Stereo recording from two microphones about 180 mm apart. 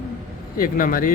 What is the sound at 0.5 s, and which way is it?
Speech, 50° left (ahead or behind).